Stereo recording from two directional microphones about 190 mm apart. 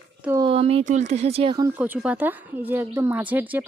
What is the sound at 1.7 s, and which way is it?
Speech, 10° right (ahead or behind).